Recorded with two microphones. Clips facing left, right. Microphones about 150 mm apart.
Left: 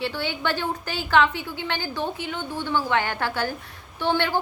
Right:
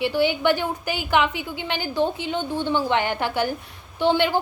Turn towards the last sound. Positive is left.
turn(degrees=-15)  # may be behind; listen again after turning